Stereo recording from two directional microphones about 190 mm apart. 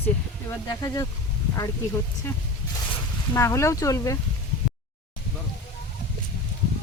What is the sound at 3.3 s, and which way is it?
Speech, 15° left (ahead or behind).